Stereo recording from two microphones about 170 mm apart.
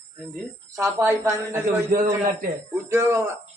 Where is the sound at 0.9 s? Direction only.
15° right (ahead or behind).